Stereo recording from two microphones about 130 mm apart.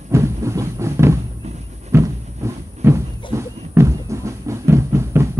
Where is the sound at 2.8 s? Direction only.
20° right (ahead or behind).